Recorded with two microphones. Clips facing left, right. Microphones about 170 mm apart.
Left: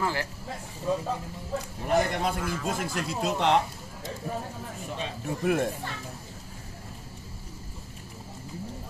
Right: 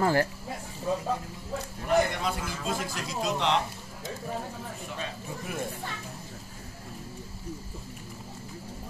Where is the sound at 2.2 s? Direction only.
55° left (ahead or behind).